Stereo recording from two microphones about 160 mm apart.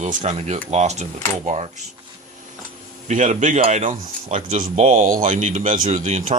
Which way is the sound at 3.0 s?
50° right (ahead or behind).